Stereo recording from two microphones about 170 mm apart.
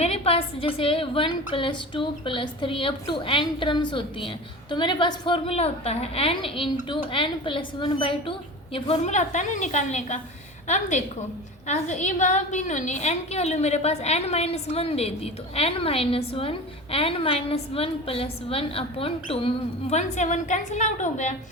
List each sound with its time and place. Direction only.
0.0 s a woman's voice: 35° left (ahead or behind)